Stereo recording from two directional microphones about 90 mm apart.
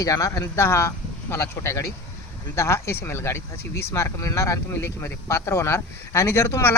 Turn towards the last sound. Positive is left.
turn(degrees=30)  # may be behind; listen again after turning